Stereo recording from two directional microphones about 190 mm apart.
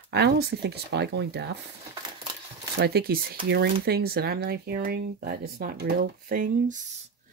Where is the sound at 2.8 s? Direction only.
55° right (ahead or behind).